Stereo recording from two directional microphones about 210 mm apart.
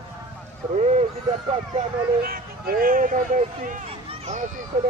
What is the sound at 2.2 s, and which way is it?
Speech, 45° right (ahead or behind).